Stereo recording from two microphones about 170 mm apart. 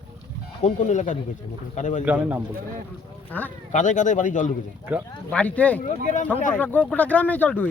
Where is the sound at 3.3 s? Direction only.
10° left (ahead or behind).